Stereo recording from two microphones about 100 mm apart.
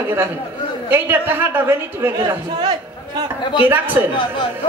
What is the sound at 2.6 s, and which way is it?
Speech, 45° right (ahead or behind).